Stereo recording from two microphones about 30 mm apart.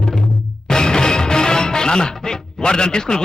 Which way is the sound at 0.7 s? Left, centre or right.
Left.